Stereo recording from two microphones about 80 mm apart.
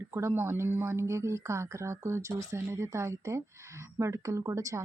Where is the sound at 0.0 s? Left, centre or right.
Right.